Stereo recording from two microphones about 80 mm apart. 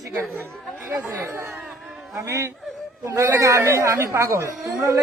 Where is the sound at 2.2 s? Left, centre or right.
Right.